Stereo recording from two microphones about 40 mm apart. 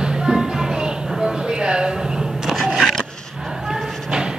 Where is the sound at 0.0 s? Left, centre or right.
Centre.